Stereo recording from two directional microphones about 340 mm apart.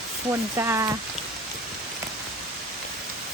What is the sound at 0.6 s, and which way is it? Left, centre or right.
Speech, centre.